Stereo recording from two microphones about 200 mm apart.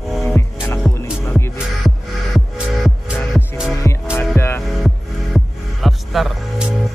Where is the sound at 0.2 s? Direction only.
10° left (ahead or behind).